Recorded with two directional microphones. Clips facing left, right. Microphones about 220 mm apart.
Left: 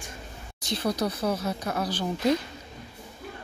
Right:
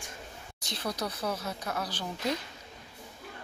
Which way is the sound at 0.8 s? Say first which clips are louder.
Left 6 dB; 35° left (ahead or behind).